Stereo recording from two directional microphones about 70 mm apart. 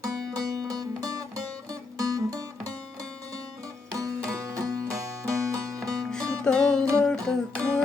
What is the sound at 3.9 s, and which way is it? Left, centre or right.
Music, right.